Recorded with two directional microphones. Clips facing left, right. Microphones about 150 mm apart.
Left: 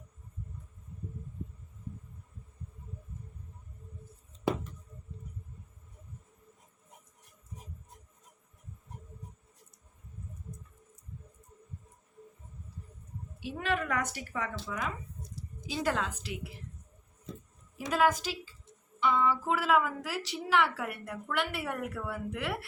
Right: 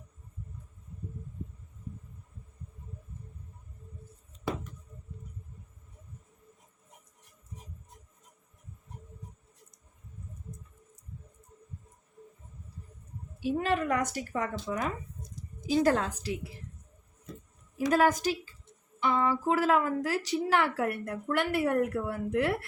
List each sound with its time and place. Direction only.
13.4 s a woman's voice: 40° right (ahead or behind)
15.6 s a woman's voice: 45° right (ahead or behind)
17.9 s a woman's voice: 45° right (ahead or behind)